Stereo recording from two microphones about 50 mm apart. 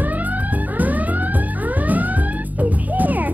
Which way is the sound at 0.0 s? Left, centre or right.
Right.